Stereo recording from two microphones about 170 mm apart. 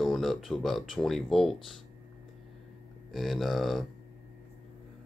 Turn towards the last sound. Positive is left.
turn(degrees=0)  # may be behind; listen again after turning